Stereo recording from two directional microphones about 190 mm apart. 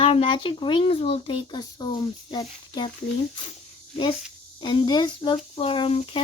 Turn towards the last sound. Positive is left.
turn(degrees=30)  # may be behind; listen again after turning